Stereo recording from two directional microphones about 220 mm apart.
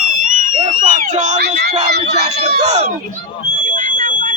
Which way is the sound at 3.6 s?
35° right (ahead or behind).